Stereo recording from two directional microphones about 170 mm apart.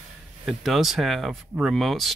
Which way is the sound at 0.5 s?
Centre (ahead or behind).